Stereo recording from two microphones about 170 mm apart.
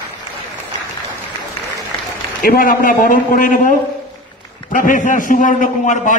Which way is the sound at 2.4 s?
55° left (ahead or behind).